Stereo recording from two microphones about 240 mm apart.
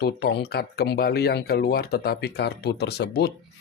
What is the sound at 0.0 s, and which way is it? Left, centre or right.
Speech, left.